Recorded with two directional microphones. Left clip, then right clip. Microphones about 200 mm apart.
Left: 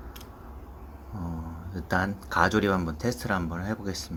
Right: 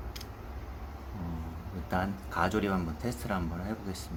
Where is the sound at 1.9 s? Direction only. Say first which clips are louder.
Left 6 dB; 15° left (ahead or behind).